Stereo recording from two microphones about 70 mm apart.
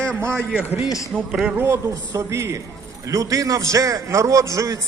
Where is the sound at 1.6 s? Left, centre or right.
Right.